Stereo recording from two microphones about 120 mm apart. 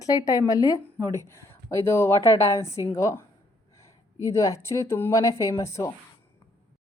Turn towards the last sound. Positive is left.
turn(degrees=25)  # may be behind; listen again after turning